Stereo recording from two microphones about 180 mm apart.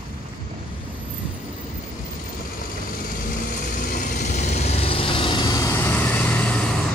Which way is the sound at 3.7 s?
45° left (ahead or behind).